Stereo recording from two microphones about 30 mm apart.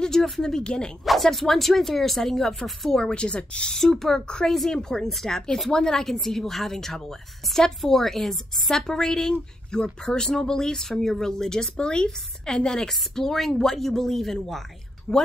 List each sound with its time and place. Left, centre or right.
0.4 s speech: left
1.0 s speech: centre
3.0 s speech: left
3.7 s a woman's voice: centre
8.6 s speech: centre